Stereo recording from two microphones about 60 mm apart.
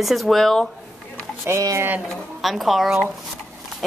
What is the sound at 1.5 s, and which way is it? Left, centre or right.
Speech, right.